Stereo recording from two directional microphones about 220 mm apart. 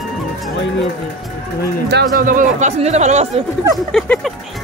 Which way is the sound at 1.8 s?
45° right (ahead or behind).